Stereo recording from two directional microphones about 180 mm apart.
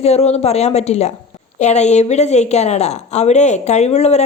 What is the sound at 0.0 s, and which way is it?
A woman's voice, 35° left (ahead or behind).